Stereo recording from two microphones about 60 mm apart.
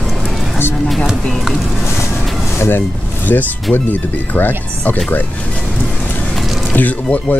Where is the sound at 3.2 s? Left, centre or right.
Left.